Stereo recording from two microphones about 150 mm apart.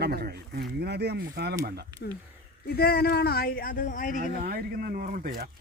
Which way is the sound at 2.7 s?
90° left.